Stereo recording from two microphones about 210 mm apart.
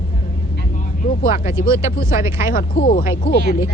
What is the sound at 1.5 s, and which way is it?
Speech, 15° right (ahead or behind).